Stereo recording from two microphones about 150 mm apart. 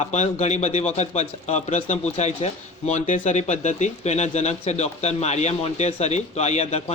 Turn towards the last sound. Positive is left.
turn(degrees=50)  # may be behind; listen again after turning